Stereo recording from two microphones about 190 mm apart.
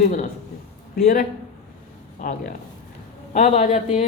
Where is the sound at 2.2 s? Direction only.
40° left (ahead or behind).